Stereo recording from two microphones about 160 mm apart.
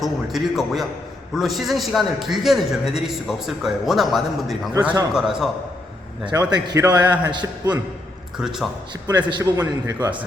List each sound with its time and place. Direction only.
0.0 s a man's voice: centre (ahead or behind)
6.5 s a man's voice: 25° right (ahead or behind)
8.4 s a man's voice: 5° right (ahead or behind)
9.1 s a man's voice: 25° right (ahead or behind)